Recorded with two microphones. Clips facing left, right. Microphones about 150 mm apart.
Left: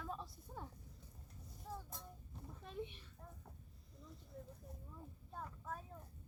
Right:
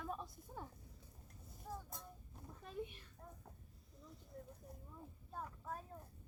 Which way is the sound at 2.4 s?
5° right (ahead or behind).